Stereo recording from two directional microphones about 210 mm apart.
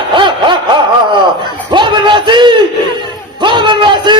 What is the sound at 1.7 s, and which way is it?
A man's voice, 20° right (ahead or behind).